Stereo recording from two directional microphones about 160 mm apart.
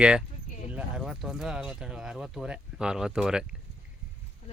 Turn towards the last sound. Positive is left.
turn(degrees=-5)  # may be behind; listen again after turning